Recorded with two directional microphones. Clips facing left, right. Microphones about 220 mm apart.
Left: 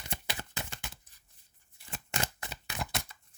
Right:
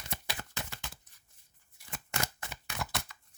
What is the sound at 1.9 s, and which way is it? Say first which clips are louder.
Shuffling cards: left 1 dB; 30° left (ahead or behind).